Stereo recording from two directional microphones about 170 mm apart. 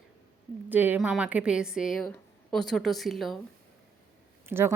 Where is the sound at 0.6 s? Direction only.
10° right (ahead or behind).